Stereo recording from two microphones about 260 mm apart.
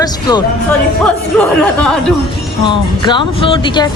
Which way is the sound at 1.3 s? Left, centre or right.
Centre.